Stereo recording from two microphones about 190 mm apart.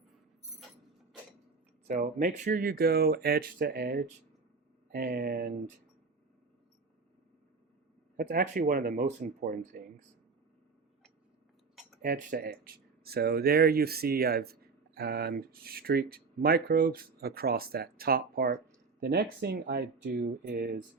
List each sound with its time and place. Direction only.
1.9 s speech: 45° right (ahead or behind)
8.2 s speech: 50° right (ahead or behind)
12.0 s speech: 50° right (ahead or behind)
20.2 s speech: 45° right (ahead or behind)